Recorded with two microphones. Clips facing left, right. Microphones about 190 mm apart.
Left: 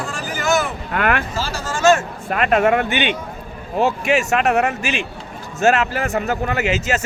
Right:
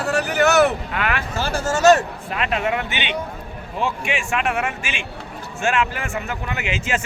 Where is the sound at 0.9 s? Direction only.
50° left (ahead or behind).